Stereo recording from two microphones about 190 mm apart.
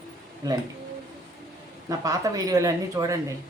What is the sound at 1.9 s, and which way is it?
Speech, 15° right (ahead or behind).